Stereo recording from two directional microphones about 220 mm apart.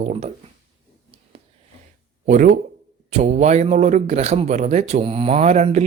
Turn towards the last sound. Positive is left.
turn(degrees=-30)  # may be behind; listen again after turning